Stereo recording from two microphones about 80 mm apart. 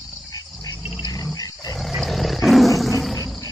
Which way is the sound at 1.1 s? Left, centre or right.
Left.